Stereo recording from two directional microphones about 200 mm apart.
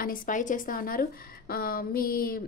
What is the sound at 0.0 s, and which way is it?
Speech, 45° left (ahead or behind).